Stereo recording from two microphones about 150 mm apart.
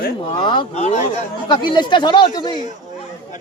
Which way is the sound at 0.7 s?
50° left (ahead or behind).